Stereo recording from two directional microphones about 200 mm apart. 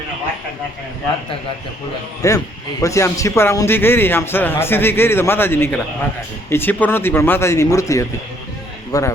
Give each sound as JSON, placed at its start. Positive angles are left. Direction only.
{"t": 2.2, "sound": "a man's voice", "side_deg": 15}